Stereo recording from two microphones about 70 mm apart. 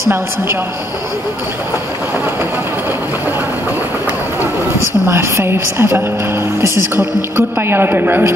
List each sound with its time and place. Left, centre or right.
5.0 s a woman's voice: right